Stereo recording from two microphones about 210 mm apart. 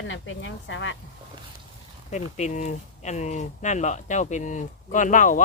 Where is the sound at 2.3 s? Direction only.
35° left (ahead or behind).